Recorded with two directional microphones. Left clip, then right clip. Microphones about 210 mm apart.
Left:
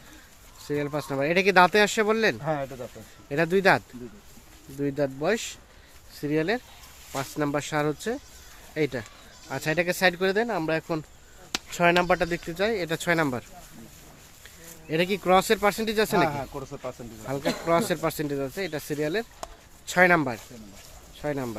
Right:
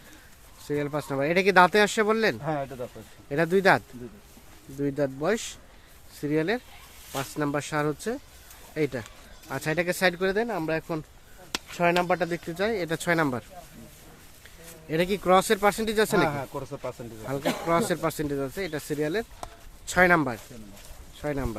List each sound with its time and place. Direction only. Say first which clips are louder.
0.7 s speech: even; centre (ahead or behind)
14.8 s speech: even; centre (ahead or behind)
16.3 s speech: even; 40° right (ahead or behind)
17.2 s speech: left 1 dB; 5° left (ahead or behind)